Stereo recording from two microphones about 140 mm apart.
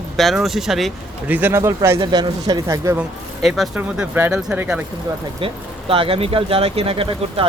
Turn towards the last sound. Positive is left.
turn(degrees=-40)  # may be behind; listen again after turning